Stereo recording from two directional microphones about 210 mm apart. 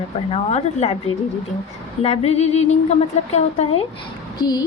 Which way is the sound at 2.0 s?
30° left (ahead or behind).